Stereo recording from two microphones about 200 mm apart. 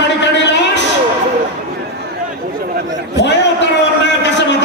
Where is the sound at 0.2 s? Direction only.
60° left (ahead or behind).